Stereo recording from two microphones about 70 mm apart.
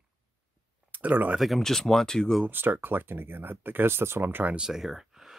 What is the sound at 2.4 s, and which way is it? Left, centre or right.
Speech, right.